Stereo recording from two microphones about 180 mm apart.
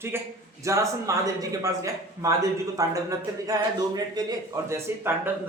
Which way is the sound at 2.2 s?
20° right (ahead or behind).